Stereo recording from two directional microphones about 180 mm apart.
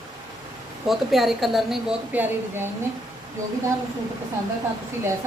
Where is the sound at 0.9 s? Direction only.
Centre (ahead or behind).